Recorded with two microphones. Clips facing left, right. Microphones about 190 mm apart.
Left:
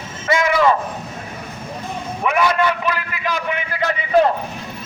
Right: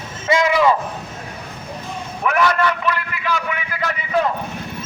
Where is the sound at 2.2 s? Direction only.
10° left (ahead or behind).